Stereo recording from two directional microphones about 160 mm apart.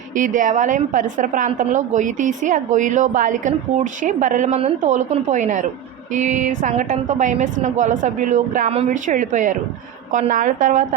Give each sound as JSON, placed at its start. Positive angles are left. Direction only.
{"t": 0.2, "sound": "a woman's voice", "side_deg": -55}